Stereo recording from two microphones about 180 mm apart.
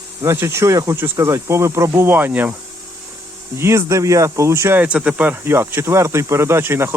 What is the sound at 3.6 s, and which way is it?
Speech, 15° right (ahead or behind).